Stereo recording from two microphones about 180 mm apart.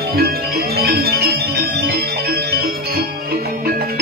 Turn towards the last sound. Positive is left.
turn(degrees=-60)  # may be behind; listen again after turning